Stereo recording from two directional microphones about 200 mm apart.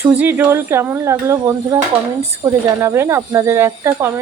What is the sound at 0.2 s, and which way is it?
A woman's voice, 10° right (ahead or behind).